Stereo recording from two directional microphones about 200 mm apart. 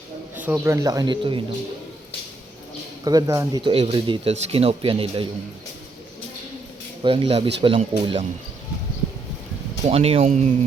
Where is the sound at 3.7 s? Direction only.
30° right (ahead or behind).